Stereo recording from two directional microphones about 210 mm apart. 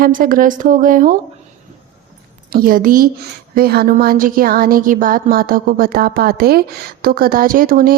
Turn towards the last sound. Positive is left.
turn(degrees=-40)  # may be behind; listen again after turning